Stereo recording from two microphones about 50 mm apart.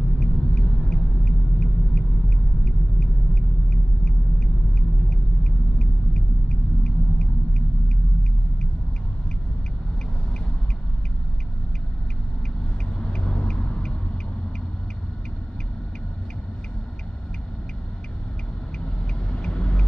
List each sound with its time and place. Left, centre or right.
0.2 s a sound: centre
12.9 s vehicle: centre
19.3 s vehicle: centre